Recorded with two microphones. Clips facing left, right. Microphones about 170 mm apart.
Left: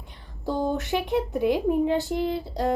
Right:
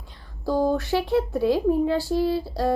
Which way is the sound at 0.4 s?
20° left (ahead or behind).